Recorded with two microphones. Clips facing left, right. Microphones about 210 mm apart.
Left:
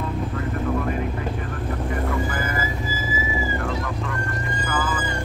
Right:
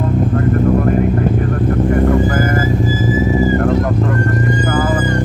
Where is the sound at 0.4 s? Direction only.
50° right (ahead or behind).